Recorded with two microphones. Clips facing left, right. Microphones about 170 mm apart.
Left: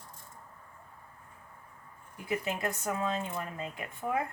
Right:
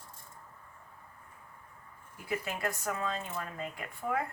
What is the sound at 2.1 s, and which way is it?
Speech, 20° left (ahead or behind).